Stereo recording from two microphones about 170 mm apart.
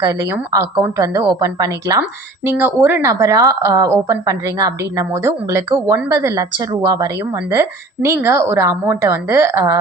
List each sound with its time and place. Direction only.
0.0 s a woman's voice: 20° right (ahead or behind)